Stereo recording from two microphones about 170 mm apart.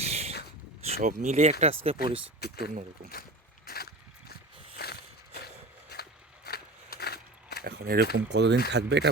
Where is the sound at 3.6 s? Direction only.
65° left (ahead or behind).